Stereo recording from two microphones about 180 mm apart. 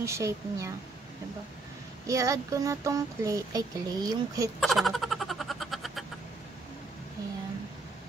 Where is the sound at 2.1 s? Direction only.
20° right (ahead or behind).